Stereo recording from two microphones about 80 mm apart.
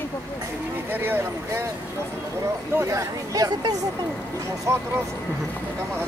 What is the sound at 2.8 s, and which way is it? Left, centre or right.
Speech, right.